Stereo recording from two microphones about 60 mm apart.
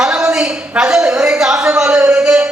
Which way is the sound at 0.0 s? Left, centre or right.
Centre.